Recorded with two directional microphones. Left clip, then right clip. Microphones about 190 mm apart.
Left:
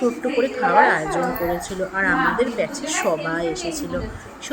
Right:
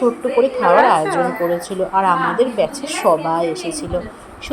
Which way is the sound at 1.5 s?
10° right (ahead or behind).